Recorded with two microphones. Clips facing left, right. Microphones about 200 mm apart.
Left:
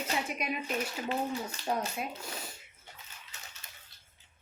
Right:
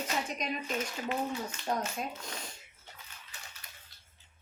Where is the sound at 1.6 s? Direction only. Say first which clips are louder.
Left 1 dB; 35° left (ahead or behind).